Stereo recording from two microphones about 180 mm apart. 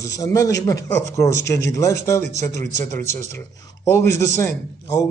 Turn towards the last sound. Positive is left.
turn(degrees=15)  # may be behind; listen again after turning